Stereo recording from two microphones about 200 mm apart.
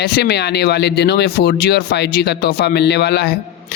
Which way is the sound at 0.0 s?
55° left (ahead or behind).